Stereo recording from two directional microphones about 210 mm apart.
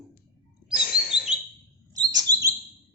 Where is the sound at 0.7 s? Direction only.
45° left (ahead or behind).